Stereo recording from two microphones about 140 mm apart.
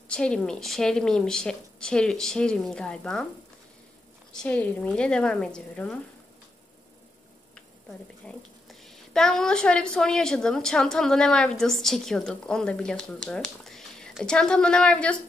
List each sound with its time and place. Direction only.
0.1 s a woman's voice: 5° left (ahead or behind)
4.3 s a woman's voice: 10° left (ahead or behind)
8.3 s a woman's voice: 5° left (ahead or behind)